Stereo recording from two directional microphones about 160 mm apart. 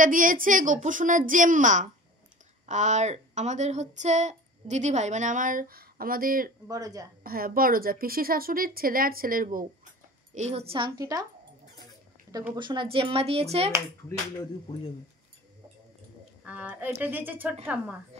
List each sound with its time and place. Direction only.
0.0 s a woman's voice: 60° right (ahead or behind)
6.7 s a woman's voice: 20° right (ahead or behind)
7.2 s a woman's voice: 65° right (ahead or behind)
10.3 s speech: 45° right (ahead or behind)
11.0 s a woman's voice: 20° right (ahead or behind)
12.5 s speech: 30° right (ahead or behind)
16.4 s speech: 10° right (ahead or behind)
18.1 s speech: 40° right (ahead or behind)